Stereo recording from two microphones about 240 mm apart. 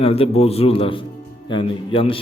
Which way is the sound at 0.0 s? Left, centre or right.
Left.